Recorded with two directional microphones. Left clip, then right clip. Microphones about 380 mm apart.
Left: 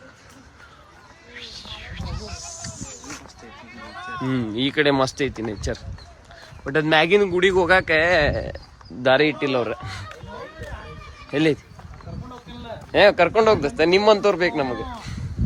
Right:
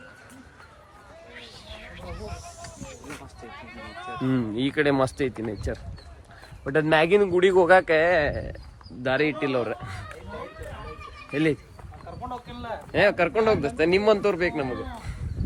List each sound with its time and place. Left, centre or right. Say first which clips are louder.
1.4 s a sound: left 8 dB; centre
4.1 s a man's voice: left 1 dB; centre
11.3 s speech: left 4 dB; centre
12.9 s speech: left 6 dB; centre